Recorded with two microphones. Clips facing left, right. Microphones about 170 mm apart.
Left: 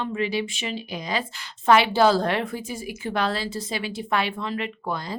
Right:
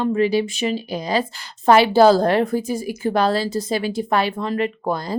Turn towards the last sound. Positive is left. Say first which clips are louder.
# right 7 dB
turn(degrees=-40)  # may be behind; listen again after turning